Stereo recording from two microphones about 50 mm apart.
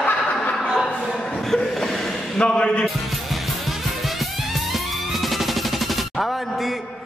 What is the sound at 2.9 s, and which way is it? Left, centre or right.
Music, centre.